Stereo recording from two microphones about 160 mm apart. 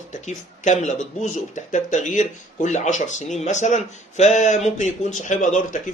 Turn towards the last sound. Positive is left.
turn(degrees=50)  # may be behind; listen again after turning